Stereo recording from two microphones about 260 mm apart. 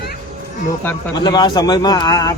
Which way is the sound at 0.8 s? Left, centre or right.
Centre.